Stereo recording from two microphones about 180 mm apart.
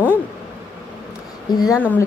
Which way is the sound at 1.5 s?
20° left (ahead or behind).